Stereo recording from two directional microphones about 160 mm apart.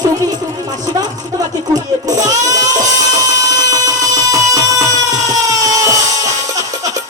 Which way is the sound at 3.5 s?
25° right (ahead or behind).